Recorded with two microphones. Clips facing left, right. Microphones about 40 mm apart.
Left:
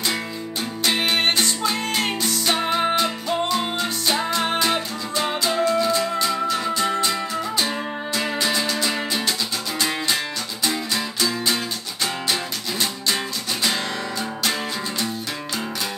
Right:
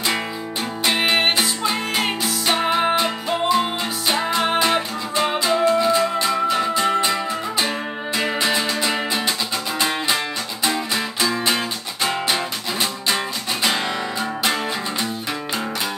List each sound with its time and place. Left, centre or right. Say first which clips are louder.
0.8 s music: right 2 dB; centre
14.4 s music: right 3 dB; right